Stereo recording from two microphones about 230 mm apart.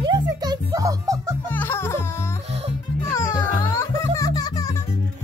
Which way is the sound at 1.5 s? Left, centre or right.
Centre.